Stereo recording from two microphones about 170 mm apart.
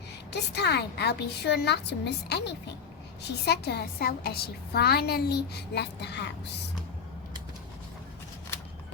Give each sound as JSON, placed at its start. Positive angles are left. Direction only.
{"t": 0.3, "sound": "a woman's voice", "side_deg": 80}
{"t": 3.4, "sound": "a woman's voice", "side_deg": 75}